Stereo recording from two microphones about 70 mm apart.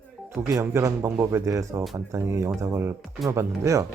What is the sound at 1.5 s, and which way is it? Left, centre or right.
Speech, right.